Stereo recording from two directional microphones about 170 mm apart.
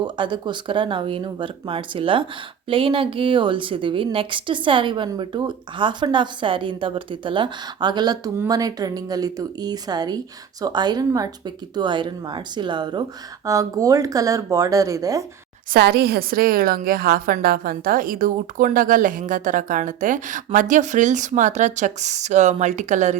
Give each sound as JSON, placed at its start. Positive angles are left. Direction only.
{"t": 0.0, "sound": "a woman's voice", "side_deg": -25}
{"t": 15.7, "sound": "a woman's voice", "side_deg": -65}